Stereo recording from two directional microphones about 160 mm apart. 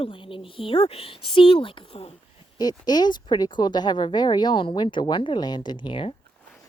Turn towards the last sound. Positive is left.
turn(degrees=30)  # may be behind; listen again after turning